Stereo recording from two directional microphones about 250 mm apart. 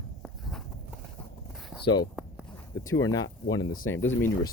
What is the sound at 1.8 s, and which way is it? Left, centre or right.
Speech, centre.